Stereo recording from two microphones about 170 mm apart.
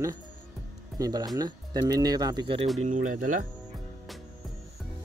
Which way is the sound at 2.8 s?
50° right (ahead or behind).